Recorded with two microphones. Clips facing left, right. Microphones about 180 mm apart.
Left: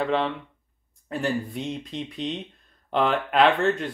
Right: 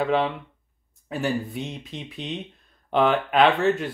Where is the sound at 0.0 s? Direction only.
Centre (ahead or behind).